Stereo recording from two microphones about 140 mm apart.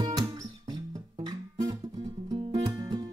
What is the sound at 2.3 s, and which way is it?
Music, 30° right (ahead or behind).